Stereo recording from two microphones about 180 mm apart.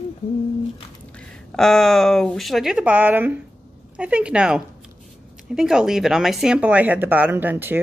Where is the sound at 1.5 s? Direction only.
Centre (ahead or behind).